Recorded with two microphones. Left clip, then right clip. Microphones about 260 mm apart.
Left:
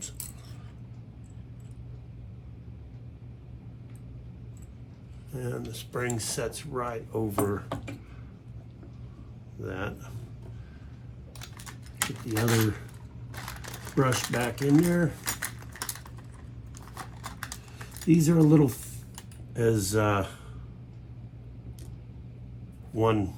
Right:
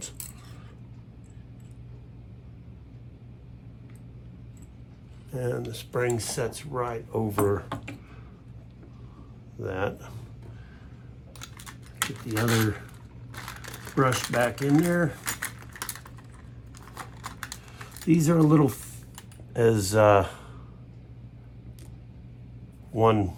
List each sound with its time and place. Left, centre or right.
5.3 s speech: right
9.6 s speech: right
11.5 s typing: centre
13.3 s camera: centre
14.6 s speech: centre
14.9 s speech: centre
15.3 s typing: centre
18.1 s speech: centre
19.5 s speech: right
23.0 s speech: right